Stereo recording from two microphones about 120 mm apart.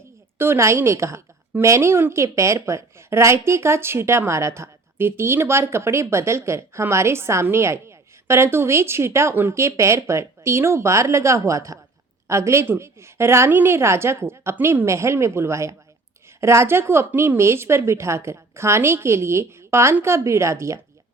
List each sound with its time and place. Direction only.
0.3 s a woman's voice: 20° right (ahead or behind)